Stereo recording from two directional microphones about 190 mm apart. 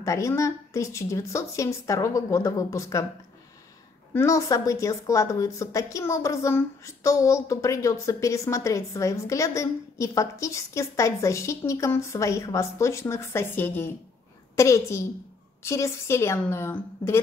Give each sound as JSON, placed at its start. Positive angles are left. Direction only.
{"t": 0.0, "sound": "speech", "side_deg": 15}
{"t": 4.1, "sound": "a woman's voice", "side_deg": 15}